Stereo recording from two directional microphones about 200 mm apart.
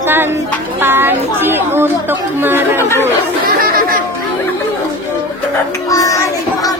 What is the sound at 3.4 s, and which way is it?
Chatter, 45° right (ahead or behind).